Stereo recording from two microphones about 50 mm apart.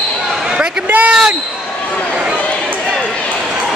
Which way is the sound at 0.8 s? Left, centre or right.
Right.